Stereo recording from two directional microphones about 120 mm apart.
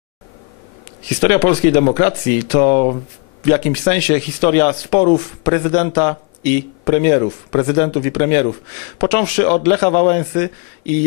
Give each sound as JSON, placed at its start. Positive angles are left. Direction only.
{"t": 1.0, "sound": "a man's voice", "side_deg": 20}